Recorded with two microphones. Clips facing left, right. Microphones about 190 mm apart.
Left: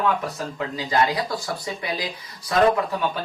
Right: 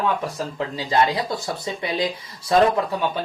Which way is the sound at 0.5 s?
25° right (ahead or behind).